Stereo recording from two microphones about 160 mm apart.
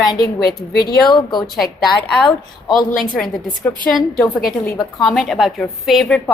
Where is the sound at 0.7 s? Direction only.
75° left (ahead or behind).